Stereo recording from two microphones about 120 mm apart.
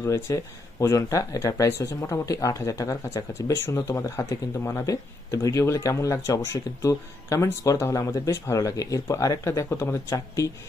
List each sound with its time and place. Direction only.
0.0 s speech: 25° left (ahead or behind)